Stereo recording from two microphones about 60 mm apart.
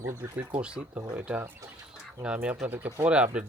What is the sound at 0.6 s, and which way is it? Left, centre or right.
Speech, centre.